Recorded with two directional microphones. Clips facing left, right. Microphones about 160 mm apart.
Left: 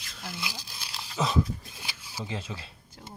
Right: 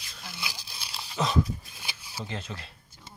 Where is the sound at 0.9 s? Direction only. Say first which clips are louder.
Even; centre (ahead or behind).